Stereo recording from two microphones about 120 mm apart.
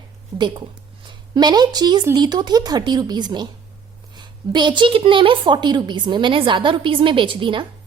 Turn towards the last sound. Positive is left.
turn(degrees=-45)  # may be behind; listen again after turning